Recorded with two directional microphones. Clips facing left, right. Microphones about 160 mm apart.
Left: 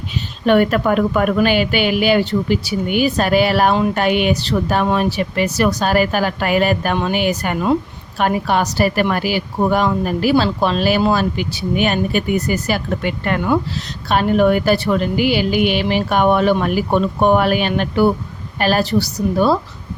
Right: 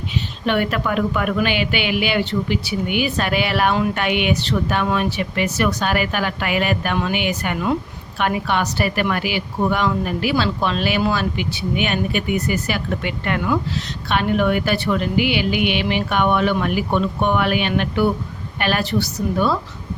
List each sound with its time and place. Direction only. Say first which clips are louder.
0.4 s a woman's voice: left 7 dB; 45° left (ahead or behind)